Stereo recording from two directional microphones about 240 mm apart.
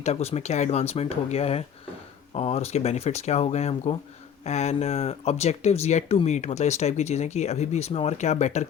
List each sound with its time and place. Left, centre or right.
0.0 s speech: left